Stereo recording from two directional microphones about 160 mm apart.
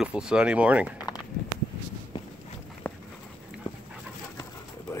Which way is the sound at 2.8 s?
10° left (ahead or behind).